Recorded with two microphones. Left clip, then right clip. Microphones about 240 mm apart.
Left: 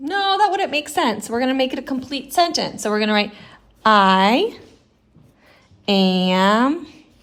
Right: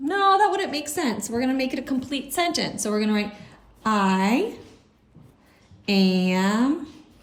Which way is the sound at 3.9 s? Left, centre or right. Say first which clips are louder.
Left 7 dB; left.